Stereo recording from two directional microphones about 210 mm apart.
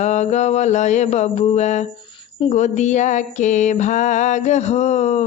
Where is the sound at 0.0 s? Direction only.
35° left (ahead or behind).